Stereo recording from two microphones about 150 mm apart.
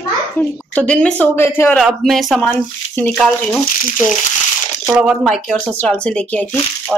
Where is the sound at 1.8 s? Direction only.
Centre (ahead or behind).